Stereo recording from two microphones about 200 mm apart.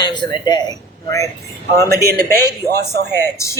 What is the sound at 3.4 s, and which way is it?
Speech, 15° left (ahead or behind).